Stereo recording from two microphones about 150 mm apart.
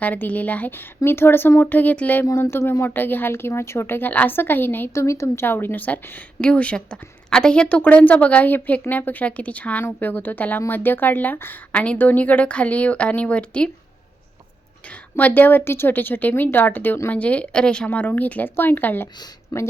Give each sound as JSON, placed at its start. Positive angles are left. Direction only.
{"t": 0.0, "sound": "a woman's voice", "side_deg": 10}
{"t": 15.1, "sound": "a woman's voice", "side_deg": 10}
{"t": 19.5, "sound": "speech", "side_deg": 25}